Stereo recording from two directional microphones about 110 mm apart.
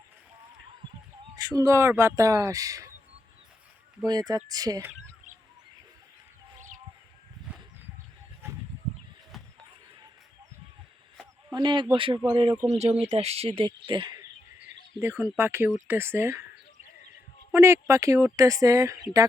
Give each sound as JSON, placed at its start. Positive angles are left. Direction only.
{"t": 1.4, "sound": "speech", "side_deg": -30}
{"t": 4.0, "sound": "speech", "side_deg": -35}
{"t": 9.3, "sound": "a sound", "side_deg": 0}
{"t": 11.5, "sound": "speech", "side_deg": -40}
{"t": 12.6, "sound": "speech", "side_deg": -80}
{"t": 14.9, "sound": "speech", "side_deg": -20}
{"t": 17.5, "sound": "speech", "side_deg": -25}